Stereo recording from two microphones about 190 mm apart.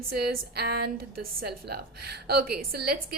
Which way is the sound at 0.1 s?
55° right (ahead or behind).